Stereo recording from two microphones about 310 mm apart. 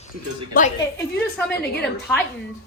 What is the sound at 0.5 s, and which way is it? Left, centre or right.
Speech, left.